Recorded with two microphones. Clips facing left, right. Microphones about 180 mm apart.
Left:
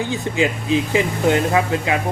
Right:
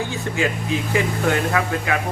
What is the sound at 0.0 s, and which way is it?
A man's voice, 20° left (ahead or behind).